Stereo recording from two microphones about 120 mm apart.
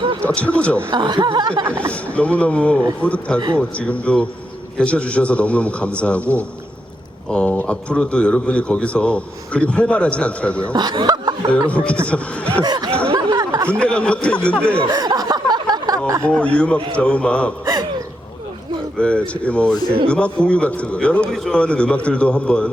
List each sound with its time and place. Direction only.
0.2 s a man's voice: 10° left (ahead or behind)
0.9 s speech: 40° right (ahead or behind)
1.9 s a man's voice: 10° left (ahead or behind)
10.7 s speech: 40° right (ahead or behind)
11.7 s a man's voice: 10° left (ahead or behind)
12.6 s speech: 35° right (ahead or behind)
13.1 s a sound: 30° right (ahead or behind)
13.7 s a man's voice: 10° left (ahead or behind)
14.8 s a sound: 35° right (ahead or behind)
16.2 s a man's voice: 10° left (ahead or behind)
18.9 s a man's voice: 10° left (ahead or behind)